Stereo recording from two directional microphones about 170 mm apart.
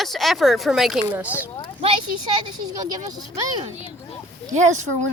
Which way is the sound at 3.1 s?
25° right (ahead or behind).